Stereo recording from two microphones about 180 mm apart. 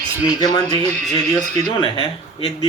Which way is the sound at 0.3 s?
25° left (ahead or behind).